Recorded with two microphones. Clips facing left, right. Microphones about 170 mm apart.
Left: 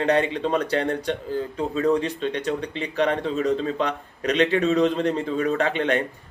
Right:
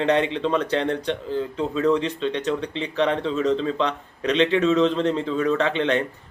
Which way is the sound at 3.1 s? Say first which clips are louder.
Right 1 dB; 50° left (ahead or behind).